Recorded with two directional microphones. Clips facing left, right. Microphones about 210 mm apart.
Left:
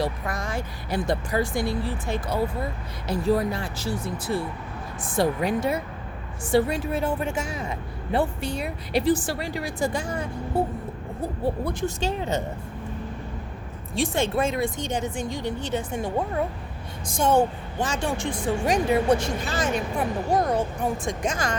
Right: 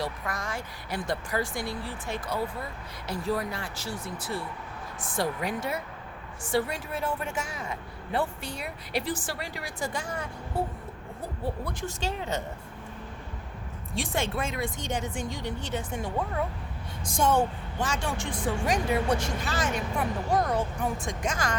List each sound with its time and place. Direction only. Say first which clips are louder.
0.0 s speech: left 5 dB; 25° left (ahead or behind)
11.6 s speech: left 6 dB; 20° left (ahead or behind)
13.9 s speech: left 6 dB; 25° left (ahead or behind)